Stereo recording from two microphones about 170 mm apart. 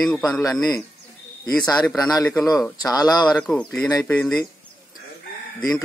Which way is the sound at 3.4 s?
5° left (ahead or behind).